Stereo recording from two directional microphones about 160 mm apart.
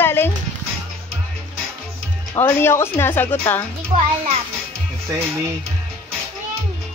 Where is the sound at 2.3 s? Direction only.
15° left (ahead or behind).